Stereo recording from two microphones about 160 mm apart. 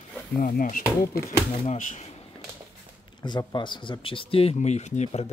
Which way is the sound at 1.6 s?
45° left (ahead or behind).